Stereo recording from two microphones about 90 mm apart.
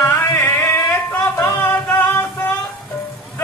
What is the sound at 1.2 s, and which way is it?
Music, 30° left (ahead or behind).